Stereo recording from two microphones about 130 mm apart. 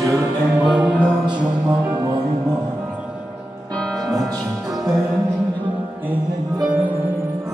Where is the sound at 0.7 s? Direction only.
10° right (ahead or behind).